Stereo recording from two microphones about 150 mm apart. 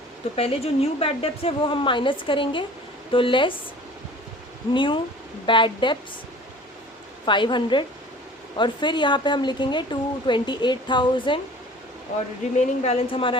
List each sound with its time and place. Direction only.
0.3 s a woman's voice: 40° left (ahead or behind)
4.7 s a woman's voice: 35° left (ahead or behind)
7.3 s a woman's voice: 30° left (ahead or behind)
12.1 s speech: 55° left (ahead or behind)
12.8 s a woman's voice: 40° left (ahead or behind)